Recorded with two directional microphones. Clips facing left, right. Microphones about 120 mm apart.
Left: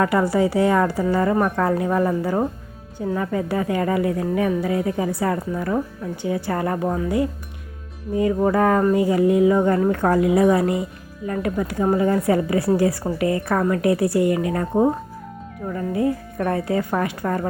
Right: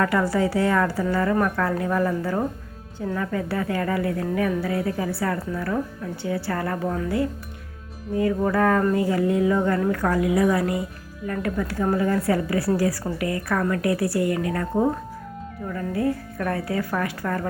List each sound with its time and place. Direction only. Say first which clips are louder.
0.0 s a woman's voice: left 3 dB; 15° left (ahead or behind)